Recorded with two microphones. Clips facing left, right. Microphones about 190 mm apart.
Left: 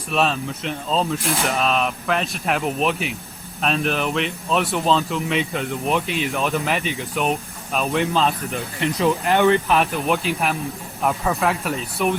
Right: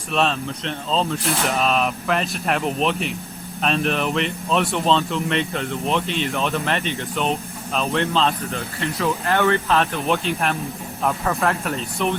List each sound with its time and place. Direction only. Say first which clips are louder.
0.1 s speech: even; 5° left (ahead or behind)